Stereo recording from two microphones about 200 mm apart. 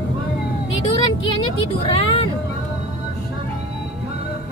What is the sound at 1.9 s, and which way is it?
Speech, 30° left (ahead or behind).